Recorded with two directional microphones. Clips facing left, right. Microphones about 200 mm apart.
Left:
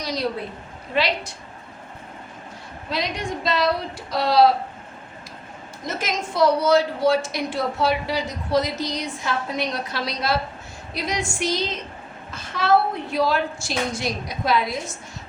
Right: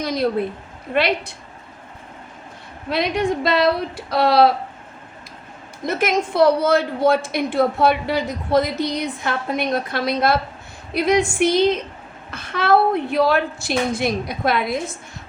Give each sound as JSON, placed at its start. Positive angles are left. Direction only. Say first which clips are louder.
{"t": 0.0, "sound": "a woman's voice", "louder": "right 6 dB", "side_deg": -55}
{"t": 2.9, "sound": "a woman's voice", "louder": "right 7 dB", "side_deg": -60}
{"t": 5.8, "sound": "a woman's voice", "louder": "right 7 dB", "side_deg": -60}